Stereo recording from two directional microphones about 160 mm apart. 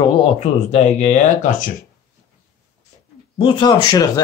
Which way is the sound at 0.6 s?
45° left (ahead or behind).